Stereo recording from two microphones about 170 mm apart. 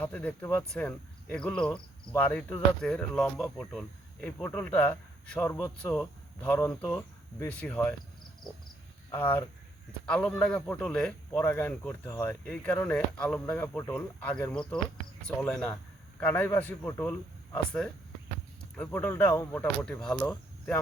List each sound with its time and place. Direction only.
0.0 s speech: 10° left (ahead or behind)
5.7 s speech: 5° left (ahead or behind)
9.1 s speech: 10° left (ahead or behind)